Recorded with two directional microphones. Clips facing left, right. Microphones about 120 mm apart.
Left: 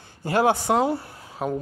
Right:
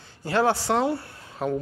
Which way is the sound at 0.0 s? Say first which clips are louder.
Left 2 dB; 50° left (ahead or behind).